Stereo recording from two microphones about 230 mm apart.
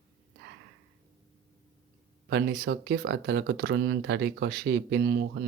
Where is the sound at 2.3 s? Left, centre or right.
Right.